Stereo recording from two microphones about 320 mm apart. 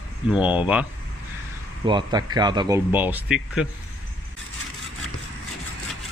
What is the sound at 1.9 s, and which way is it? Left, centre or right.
Speech, centre.